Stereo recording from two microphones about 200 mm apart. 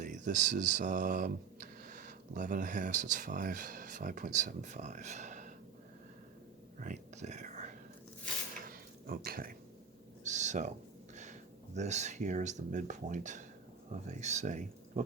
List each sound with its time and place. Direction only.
0.0 s speech: 40° right (ahead or behind)
6.7 s whispering: 40° right (ahead or behind)
8.6 s a sound: 45° right (ahead or behind)
10.2 s owl: 35° right (ahead or behind)
11.1 s speech: 35° right (ahead or behind)